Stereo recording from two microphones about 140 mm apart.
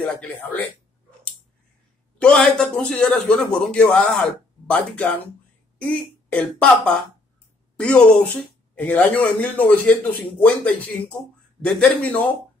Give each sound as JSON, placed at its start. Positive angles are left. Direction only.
{"t": 0.0, "sound": "a man's voice", "side_deg": 10}
{"t": 2.1, "sound": "a man's voice", "side_deg": 5}
{"t": 7.7, "sound": "a sound", "side_deg": 5}
{"t": 8.7, "sound": "a man's voice", "side_deg": 10}